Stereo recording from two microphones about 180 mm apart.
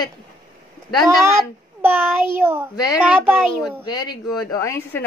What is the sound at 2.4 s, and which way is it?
A child's voice, 15° right (ahead or behind).